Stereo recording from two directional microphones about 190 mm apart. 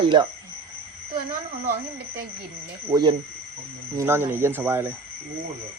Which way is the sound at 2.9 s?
25° right (ahead or behind).